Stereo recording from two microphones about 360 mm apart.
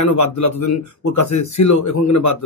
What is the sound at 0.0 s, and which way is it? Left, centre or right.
Speech, left.